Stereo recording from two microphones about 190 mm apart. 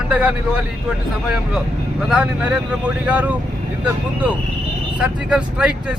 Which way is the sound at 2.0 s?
5° right (ahead or behind).